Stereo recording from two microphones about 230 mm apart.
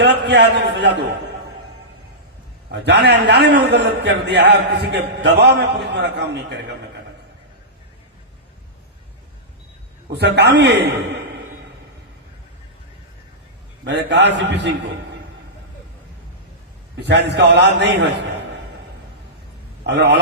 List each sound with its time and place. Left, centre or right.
0.0 s a man's voice: right
2.7 s a man's voice: right
10.1 s a man's voice: right
13.8 s a man's voice: right
17.0 s a man's voice: right
19.8 s a man's voice: right